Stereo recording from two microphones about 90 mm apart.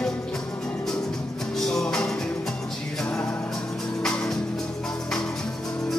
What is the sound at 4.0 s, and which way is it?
Music, 5° left (ahead or behind).